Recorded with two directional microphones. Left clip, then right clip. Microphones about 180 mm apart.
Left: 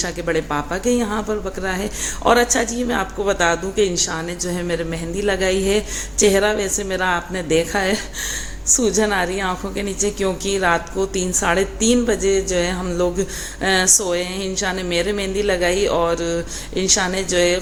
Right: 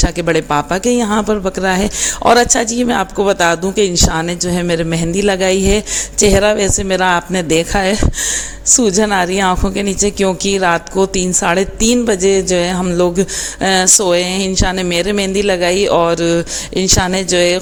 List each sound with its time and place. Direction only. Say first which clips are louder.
0.0 s speech: right 6 dB; 50° right (ahead or behind)